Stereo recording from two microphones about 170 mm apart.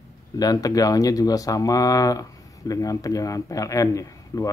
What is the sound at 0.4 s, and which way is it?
Speech, 20° left (ahead or behind).